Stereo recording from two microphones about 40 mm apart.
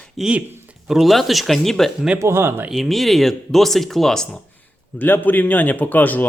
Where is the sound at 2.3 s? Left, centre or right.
Right.